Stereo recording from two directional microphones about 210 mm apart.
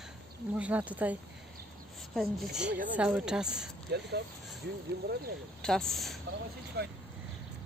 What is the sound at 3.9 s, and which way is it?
Speech, 50° right (ahead or behind).